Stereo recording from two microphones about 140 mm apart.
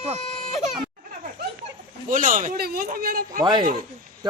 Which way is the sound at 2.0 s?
70° right (ahead or behind).